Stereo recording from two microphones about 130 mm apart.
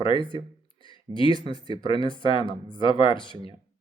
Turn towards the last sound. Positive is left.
turn(degrees=40)  # may be behind; listen again after turning